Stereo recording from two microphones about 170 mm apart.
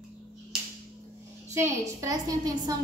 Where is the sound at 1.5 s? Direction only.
20° right (ahead or behind).